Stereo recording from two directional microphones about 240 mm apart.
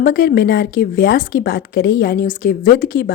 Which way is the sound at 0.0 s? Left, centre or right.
Left.